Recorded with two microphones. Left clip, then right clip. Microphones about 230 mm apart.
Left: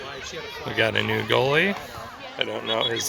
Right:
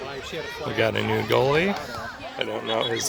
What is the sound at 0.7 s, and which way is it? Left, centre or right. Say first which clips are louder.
Speech: left 1 dB; centre.